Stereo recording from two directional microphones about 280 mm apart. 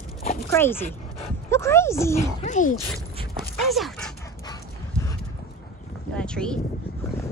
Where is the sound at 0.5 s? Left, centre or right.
Centre.